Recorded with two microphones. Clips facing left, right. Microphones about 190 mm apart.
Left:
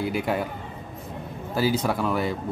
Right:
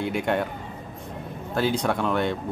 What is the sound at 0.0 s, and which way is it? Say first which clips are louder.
Speech: right 1 dB; centre (ahead or behind).